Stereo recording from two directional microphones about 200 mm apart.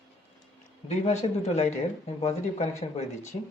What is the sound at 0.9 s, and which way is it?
Speech, 35° left (ahead or behind).